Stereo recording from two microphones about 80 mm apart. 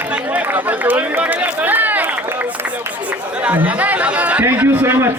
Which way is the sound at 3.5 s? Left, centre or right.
Centre.